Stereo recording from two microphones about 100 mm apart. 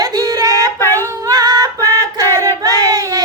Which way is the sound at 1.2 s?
45° right (ahead or behind).